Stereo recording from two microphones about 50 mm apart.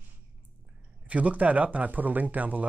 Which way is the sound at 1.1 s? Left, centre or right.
Right.